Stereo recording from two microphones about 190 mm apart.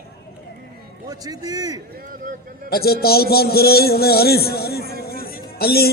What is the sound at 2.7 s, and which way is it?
A man's voice, 55° left (ahead or behind).